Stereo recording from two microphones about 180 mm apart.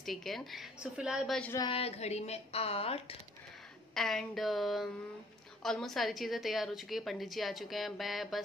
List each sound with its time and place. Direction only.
0.0 s a woman's voice: centre (ahead or behind)
1.7 s a woman's voice: 35° left (ahead or behind)
3.9 s a woman's voice: centre (ahead or behind)